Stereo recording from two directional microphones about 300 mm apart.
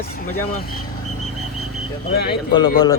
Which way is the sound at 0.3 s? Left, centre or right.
Left.